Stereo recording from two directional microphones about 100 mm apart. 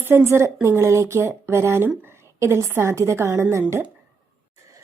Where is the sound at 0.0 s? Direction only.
20° right (ahead or behind).